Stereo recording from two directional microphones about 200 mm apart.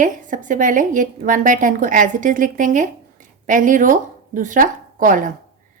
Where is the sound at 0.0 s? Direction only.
40° right (ahead or behind).